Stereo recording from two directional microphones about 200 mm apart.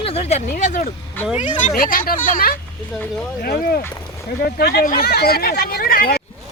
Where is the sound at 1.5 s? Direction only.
40° left (ahead or behind).